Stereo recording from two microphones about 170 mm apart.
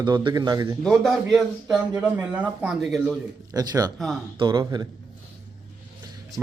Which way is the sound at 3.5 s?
20° right (ahead or behind).